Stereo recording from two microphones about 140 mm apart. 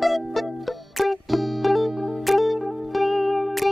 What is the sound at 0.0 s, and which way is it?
Music, centre (ahead or behind).